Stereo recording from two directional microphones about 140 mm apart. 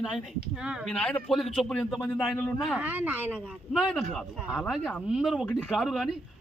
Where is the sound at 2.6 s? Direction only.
5° right (ahead or behind).